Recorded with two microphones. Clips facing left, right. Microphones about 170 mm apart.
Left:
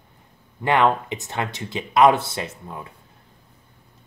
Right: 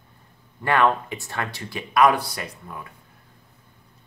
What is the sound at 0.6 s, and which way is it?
Speech, 20° left (ahead or behind).